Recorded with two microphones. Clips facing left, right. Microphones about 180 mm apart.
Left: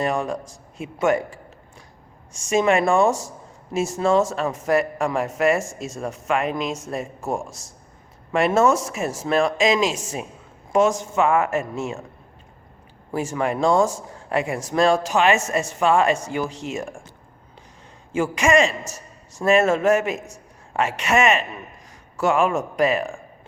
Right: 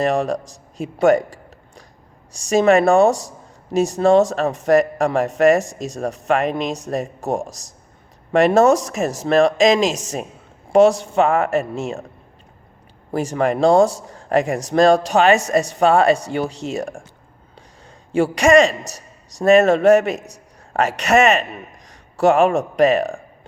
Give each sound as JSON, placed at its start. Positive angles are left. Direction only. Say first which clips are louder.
{"t": 0.8, "sound": "speech", "louder": "right 6 dB", "side_deg": -35}
{"t": 8.3, "sound": "speech", "louder": "right 5 dB", "side_deg": -40}
{"t": 13.1, "sound": "speech", "louder": "right 4 dB", "side_deg": -35}
{"t": 18.1, "sound": "speech", "louder": "right 5 dB", "side_deg": -35}